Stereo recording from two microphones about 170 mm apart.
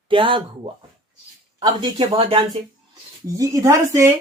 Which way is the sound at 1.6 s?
25° right (ahead or behind).